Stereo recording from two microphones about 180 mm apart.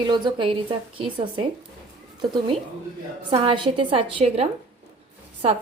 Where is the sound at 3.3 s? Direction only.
25° right (ahead or behind).